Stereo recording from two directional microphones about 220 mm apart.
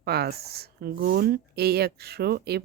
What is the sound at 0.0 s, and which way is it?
Speech, 45° right (ahead or behind).